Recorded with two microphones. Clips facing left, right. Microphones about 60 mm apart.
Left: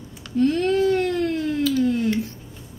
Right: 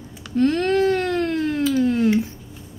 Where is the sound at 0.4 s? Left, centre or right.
Right.